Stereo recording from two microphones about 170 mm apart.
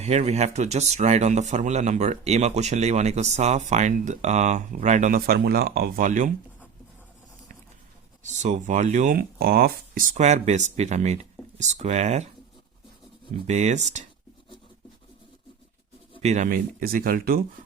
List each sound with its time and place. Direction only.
0.0 s speech: 40° right (ahead or behind)
8.2 s speech: 45° right (ahead or behind)
9.1 s speech: 60° right (ahead or behind); by 12.3 s 40° right (ahead or behind)
13.5 s speech: 45° right (ahead or behind)
16.2 s speech: 45° right (ahead or behind); by 17.4 s 60° right (ahead or behind)